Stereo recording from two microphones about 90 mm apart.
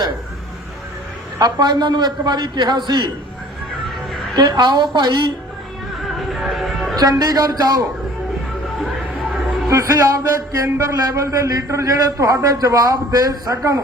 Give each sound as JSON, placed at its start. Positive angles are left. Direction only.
{"t": 1.4, "sound": "a man's voice", "side_deg": -50}
{"t": 4.4, "sound": "a man's voice", "side_deg": -55}
{"t": 6.0, "sound": "music", "side_deg": 0}
{"t": 6.9, "sound": "speech", "side_deg": -45}
{"t": 9.6, "sound": "a man's voice", "side_deg": -35}